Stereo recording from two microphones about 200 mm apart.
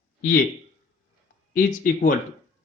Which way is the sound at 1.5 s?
45° left (ahead or behind).